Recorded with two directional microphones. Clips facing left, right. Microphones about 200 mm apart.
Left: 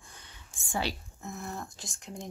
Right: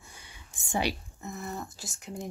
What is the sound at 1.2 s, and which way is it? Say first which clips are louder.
Speech: right 2 dB; centre (ahead or behind).